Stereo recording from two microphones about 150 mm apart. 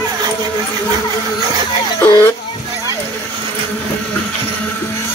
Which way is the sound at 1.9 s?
20° left (ahead or behind).